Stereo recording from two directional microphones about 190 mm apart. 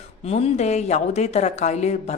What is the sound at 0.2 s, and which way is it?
Speech, 35° left (ahead or behind).